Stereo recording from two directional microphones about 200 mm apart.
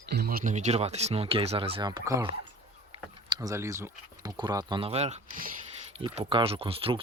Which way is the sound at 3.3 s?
15° right (ahead or behind).